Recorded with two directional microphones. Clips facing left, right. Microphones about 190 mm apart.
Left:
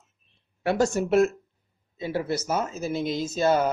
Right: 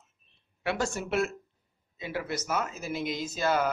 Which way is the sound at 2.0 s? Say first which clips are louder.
Left 6 dB; 30° left (ahead or behind).